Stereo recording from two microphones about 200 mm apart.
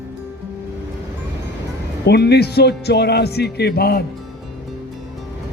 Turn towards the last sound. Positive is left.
turn(degrees=50)  # may be behind; listen again after turning